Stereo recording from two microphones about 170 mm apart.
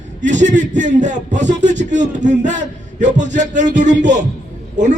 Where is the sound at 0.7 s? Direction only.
45° right (ahead or behind).